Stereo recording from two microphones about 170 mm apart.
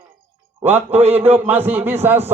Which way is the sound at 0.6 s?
10° right (ahead or behind).